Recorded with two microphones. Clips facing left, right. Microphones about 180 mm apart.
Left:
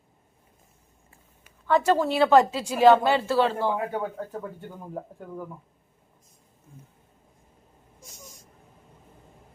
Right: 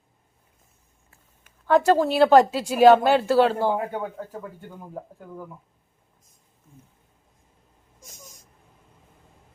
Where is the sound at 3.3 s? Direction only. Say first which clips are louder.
Right 4 dB; 40° right (ahead or behind).